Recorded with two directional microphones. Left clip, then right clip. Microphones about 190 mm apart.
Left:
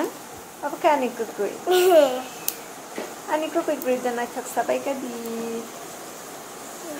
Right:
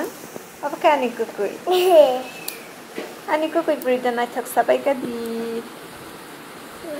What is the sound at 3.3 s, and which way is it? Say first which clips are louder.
Speech: right 4 dB; 15° right (ahead or behind).